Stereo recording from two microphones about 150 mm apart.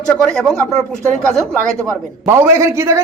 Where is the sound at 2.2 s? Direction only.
20° right (ahead or behind).